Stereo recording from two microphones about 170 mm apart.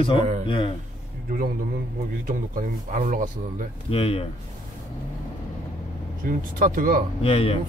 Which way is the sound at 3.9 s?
35° left (ahead or behind).